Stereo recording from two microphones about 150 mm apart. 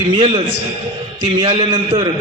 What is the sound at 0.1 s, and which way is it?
A man's voice, 35° right (ahead or behind).